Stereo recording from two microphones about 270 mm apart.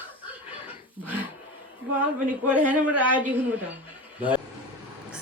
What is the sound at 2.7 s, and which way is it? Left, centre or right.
Speech, centre.